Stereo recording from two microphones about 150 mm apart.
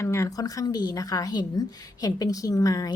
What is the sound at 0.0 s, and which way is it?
A woman's voice, 20° left (ahead or behind).